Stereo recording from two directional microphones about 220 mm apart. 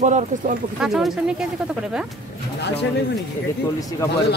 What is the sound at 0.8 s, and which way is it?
Speech, centre (ahead or behind).